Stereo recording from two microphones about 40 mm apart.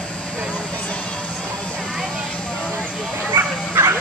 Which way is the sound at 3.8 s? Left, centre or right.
Right.